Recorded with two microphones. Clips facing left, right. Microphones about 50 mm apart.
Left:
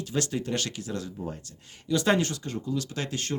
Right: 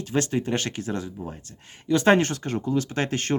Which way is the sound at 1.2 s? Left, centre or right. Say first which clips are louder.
Even; centre.